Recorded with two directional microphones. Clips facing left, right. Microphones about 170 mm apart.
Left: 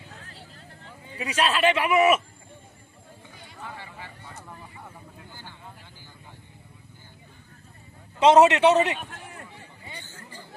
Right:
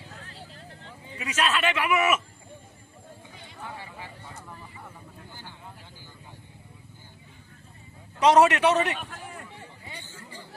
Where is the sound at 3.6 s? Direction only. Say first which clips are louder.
Even; 15° right (ahead or behind).